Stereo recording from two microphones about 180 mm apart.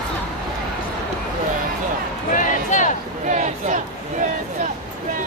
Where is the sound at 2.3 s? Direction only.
45° left (ahead or behind).